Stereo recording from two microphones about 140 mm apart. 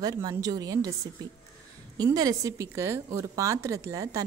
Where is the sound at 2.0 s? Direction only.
25° right (ahead or behind).